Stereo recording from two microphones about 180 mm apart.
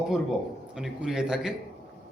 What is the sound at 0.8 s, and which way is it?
Speech, 5° right (ahead or behind).